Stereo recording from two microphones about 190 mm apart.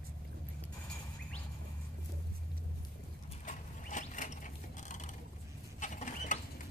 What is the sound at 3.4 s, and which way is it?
Mechanisms, 40° left (ahead or behind).